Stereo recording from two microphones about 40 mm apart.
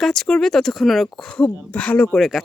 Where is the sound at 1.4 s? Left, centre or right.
Left.